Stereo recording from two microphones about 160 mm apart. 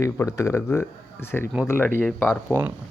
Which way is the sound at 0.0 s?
20° left (ahead or behind).